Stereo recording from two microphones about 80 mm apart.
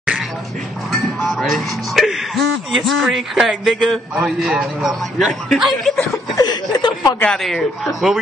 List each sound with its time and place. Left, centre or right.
1.2 s speech: centre
6.3 s chuckle: left
7.2 s speech: centre